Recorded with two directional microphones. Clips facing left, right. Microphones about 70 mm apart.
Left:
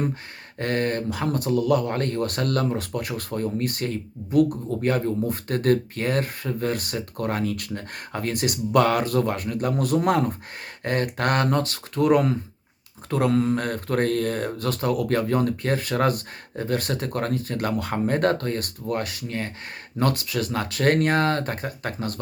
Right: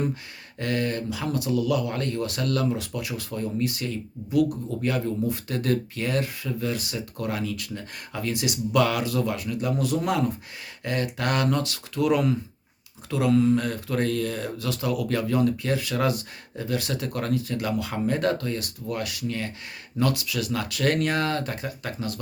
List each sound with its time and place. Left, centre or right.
0.6 s speech: left